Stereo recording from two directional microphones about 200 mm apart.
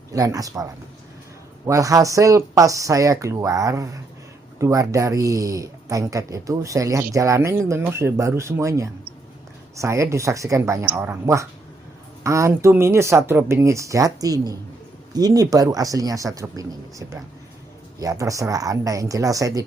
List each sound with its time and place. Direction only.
0.1 s speech: 15° right (ahead or behind)